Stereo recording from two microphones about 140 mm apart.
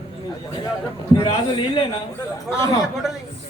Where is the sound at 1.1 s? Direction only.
35° left (ahead or behind).